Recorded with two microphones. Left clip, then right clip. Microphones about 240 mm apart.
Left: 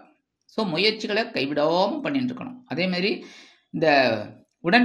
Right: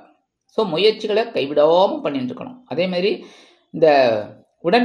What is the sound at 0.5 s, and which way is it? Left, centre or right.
Speech, left.